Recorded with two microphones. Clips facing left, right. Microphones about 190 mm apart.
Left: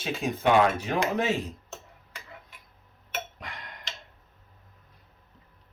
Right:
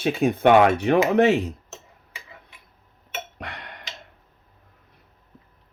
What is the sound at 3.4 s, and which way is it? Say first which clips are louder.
Tick-tock: right 5 dB; 70° right (ahead or behind).